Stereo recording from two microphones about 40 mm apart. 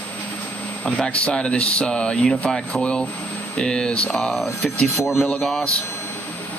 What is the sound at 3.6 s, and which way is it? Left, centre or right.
Speech, centre.